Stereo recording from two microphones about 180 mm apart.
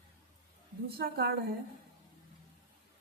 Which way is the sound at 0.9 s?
60° right (ahead or behind).